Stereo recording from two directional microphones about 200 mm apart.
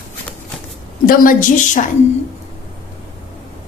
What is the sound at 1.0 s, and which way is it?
Speech, 45° left (ahead or behind).